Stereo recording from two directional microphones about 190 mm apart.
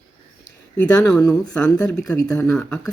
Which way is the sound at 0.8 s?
Centre (ahead or behind).